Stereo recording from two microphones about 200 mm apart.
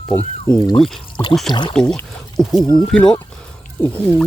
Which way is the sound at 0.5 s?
25° left (ahead or behind).